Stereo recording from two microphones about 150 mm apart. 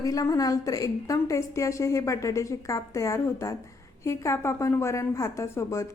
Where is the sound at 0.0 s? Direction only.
20° left (ahead or behind).